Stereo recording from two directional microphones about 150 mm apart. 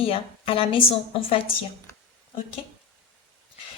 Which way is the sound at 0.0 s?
40° left (ahead or behind).